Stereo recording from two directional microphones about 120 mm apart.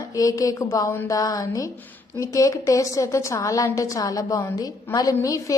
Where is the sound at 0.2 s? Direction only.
30° left (ahead or behind).